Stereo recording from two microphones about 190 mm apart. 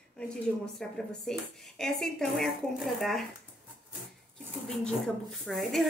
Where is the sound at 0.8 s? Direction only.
Centre (ahead or behind).